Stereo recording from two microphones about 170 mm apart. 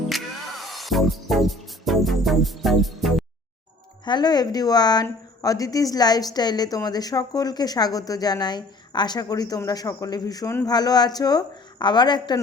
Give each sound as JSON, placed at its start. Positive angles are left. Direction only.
{"t": 0.1, "sound": "music", "side_deg": 0}
{"t": 4.0, "sound": "speech", "side_deg": 25}